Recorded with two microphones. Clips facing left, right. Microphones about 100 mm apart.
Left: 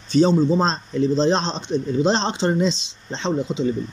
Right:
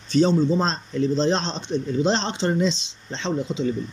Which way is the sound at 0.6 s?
20° left (ahead or behind).